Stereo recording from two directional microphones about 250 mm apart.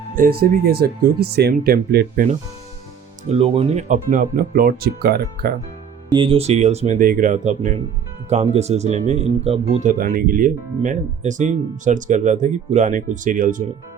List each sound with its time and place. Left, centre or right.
0.2 s speech: right
3.2 s speech: right
6.1 s speech: right